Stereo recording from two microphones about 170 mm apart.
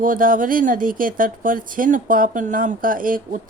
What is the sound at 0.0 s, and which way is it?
Speech, 55° right (ahead or behind).